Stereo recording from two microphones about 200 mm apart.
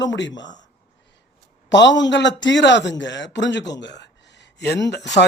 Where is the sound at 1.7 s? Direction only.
65° left (ahead or behind).